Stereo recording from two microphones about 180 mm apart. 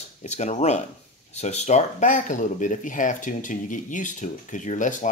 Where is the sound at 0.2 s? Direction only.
40° left (ahead or behind).